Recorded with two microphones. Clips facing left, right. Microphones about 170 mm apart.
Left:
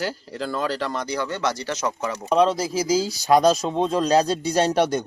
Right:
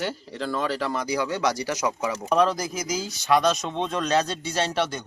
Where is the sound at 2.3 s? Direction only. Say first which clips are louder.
Left 3 dB; 25° left (ahead or behind).